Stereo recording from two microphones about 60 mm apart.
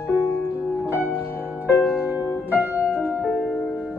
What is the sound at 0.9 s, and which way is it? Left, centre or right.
Music, right.